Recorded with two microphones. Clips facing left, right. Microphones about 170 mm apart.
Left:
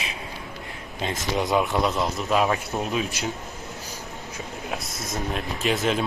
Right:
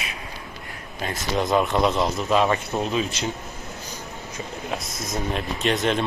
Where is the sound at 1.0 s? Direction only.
25° left (ahead or behind).